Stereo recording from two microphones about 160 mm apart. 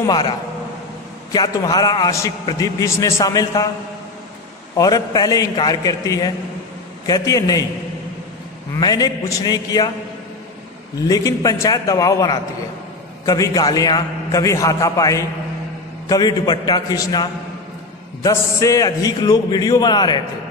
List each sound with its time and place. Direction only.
0.0 s a man's voice: 25° left (ahead or behind)
1.3 s a man's voice: 25° left (ahead or behind)
4.7 s a man's voice: 25° left (ahead or behind)
8.7 s a man's voice: 25° left (ahead or behind)
11.1 s a man's voice: 20° left (ahead or behind)